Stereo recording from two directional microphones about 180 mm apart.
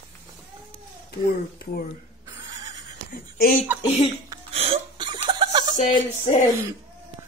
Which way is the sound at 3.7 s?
10° right (ahead or behind).